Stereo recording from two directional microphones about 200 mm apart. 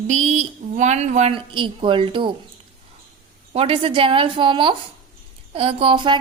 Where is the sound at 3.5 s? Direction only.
30° right (ahead or behind).